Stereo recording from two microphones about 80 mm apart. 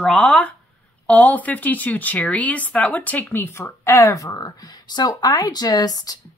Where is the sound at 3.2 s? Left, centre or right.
Left.